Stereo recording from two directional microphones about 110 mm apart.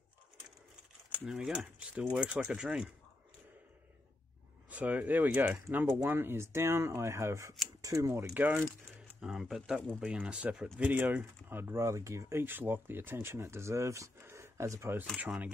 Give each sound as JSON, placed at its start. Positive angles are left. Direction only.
{"t": 1.2, "sound": "speech", "side_deg": -5}
{"t": 4.6, "sound": "speech", "side_deg": -15}
{"t": 9.2, "sound": "speech", "side_deg": -5}
{"t": 15.1, "sound": "speech", "side_deg": -10}